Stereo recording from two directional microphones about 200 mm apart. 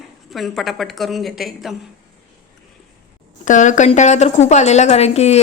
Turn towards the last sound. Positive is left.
turn(degrees=30)  # may be behind; listen again after turning